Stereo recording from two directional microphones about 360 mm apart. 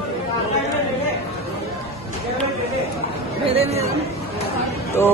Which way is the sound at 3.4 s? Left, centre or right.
Centre.